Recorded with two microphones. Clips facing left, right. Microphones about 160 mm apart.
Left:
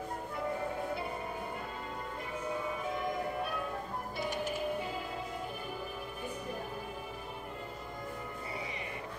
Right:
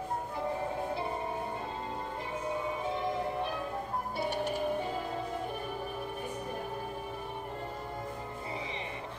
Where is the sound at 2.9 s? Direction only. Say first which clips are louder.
Right 2 dB; 25° right (ahead or behind).